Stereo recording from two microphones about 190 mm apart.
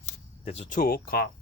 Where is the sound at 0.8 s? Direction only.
50° left (ahead or behind).